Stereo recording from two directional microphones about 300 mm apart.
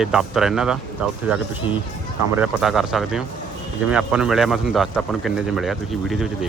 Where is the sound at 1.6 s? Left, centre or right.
Centre.